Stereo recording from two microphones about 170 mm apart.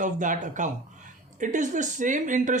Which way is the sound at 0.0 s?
50° right (ahead or behind).